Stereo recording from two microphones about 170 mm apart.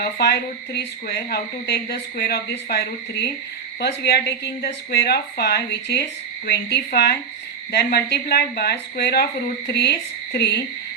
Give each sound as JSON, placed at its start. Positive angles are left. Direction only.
{"t": 0.0, "sound": "speech", "side_deg": 70}